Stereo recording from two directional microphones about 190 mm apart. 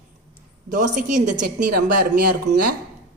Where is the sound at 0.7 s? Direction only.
40° right (ahead or behind).